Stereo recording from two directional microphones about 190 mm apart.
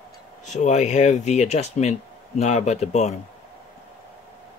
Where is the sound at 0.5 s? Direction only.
40° left (ahead or behind).